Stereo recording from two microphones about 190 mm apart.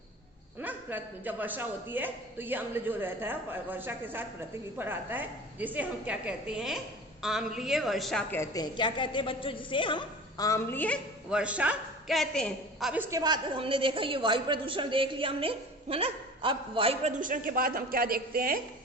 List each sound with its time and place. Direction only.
0.6 s a man's voice: 10° right (ahead or behind)
8.4 s a woman's voice: 20° left (ahead or behind)
11.3 s a woman's voice: 5° right (ahead or behind)
12.9 s a woman's voice: 15° right (ahead or behind); by 18.6 s 50° right (ahead or behind)